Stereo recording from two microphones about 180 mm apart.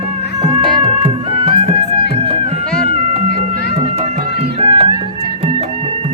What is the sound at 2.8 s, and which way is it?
Music, 35° right (ahead or behind).